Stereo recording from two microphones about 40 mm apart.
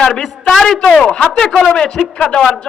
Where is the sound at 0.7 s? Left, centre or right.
Centre.